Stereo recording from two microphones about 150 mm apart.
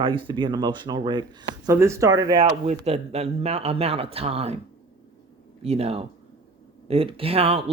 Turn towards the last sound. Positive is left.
turn(degrees=-40)  # may be behind; listen again after turning